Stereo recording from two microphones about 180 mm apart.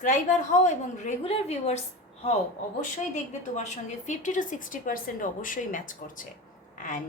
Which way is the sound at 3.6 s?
40° left (ahead or behind).